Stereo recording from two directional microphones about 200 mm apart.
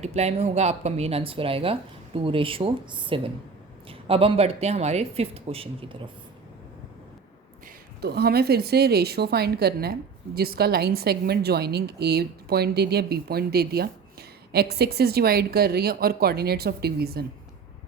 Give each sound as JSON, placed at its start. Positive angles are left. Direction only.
{"t": 0.0, "sound": "speech", "side_deg": -35}
{"t": 8.0, "sound": "a woman's voice", "side_deg": -55}